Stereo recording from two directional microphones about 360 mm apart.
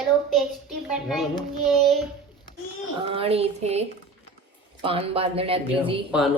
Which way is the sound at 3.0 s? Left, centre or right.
Centre.